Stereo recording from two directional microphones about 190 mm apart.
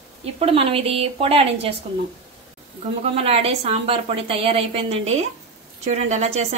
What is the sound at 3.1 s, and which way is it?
A woman's voice, 30° right (ahead or behind).